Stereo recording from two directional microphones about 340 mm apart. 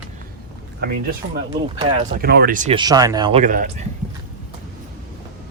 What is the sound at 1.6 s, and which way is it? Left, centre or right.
Speech, right.